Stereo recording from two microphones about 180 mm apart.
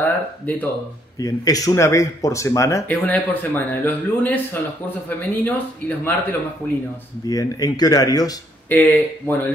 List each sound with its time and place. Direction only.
0.0 s speech: 10° left (ahead or behind)
7.2 s speech: 20° left (ahead or behind)
8.6 s speech: 10° left (ahead or behind)